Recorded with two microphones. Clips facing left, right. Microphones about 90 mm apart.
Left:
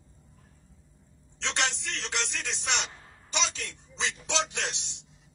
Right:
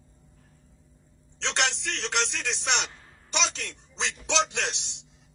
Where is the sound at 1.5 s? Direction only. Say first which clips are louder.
Right 2 dB; 65° right (ahead or behind).